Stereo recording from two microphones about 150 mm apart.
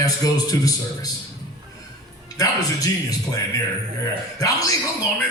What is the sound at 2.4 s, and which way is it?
Speech, 25° left (ahead or behind).